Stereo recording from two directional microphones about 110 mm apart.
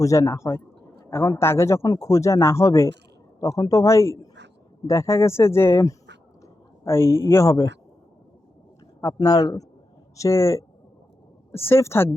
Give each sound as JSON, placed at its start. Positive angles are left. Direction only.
{"t": 0.0, "sound": "a man's voice", "side_deg": 25}
{"t": 9.1, "sound": "a man's voice", "side_deg": 35}